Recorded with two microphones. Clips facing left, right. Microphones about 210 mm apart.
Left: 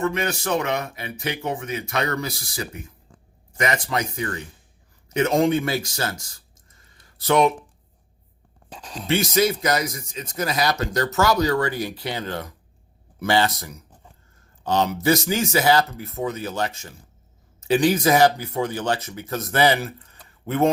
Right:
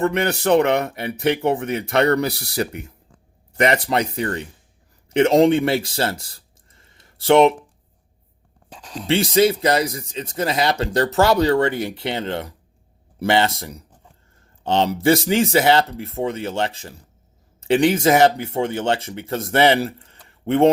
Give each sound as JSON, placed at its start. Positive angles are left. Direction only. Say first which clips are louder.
{"t": 0.0, "sound": "speech", "louder": "right 5 dB", "side_deg": -60}
{"t": 3.6, "sound": "speech", "louder": "right 6 dB", "side_deg": -30}
{"t": 9.0, "sound": "speech", "louder": "right 4 dB", "side_deg": -30}